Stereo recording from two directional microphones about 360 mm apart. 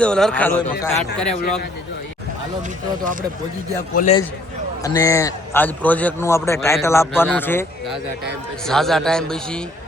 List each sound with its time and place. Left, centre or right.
0.0 s a man's voice: centre
3.9 s a man's voice: centre
4.8 s a man's voice: centre